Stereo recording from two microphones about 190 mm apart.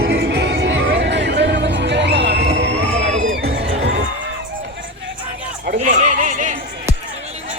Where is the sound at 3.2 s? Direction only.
90° right.